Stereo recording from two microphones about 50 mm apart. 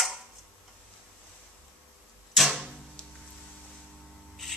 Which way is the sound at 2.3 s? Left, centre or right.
Centre.